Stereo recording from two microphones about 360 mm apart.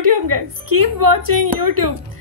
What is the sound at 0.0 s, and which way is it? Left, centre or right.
A woman's voice, right.